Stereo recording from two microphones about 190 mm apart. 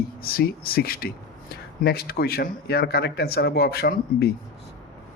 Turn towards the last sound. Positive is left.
turn(degrees=55)  # may be behind; listen again after turning